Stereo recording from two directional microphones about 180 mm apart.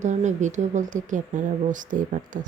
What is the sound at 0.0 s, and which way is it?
Speech, 40° right (ahead or behind).